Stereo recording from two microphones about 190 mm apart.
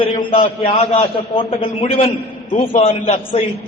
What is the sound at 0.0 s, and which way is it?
A man's voice, 30° left (ahead or behind).